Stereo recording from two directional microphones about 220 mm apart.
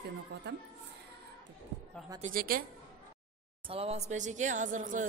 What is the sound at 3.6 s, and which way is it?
Speech, 25° right (ahead or behind).